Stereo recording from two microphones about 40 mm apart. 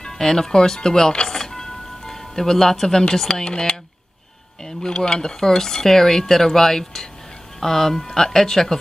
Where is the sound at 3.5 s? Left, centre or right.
Centre.